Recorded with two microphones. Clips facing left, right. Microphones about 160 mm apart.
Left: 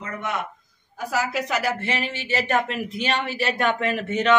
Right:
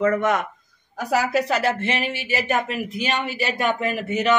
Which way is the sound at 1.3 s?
30° right (ahead or behind).